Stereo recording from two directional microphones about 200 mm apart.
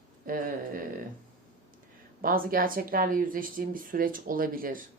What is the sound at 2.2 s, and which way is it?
Speech, 45° right (ahead or behind).